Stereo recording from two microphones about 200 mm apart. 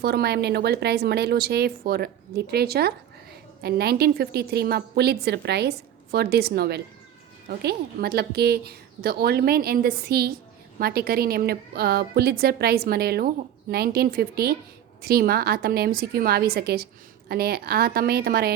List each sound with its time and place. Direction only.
0.0 s a woman's voice: 55° right (ahead or behind)